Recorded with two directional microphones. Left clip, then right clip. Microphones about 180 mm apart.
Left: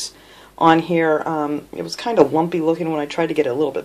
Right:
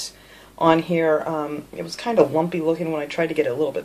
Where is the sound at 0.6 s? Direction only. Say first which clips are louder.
Left 3 dB; 40° left (ahead or behind).